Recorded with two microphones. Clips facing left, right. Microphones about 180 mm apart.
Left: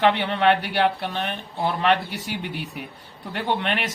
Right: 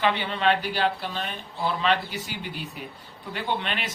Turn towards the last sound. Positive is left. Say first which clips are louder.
# left 4 dB
turn(degrees=60)  # may be behind; listen again after turning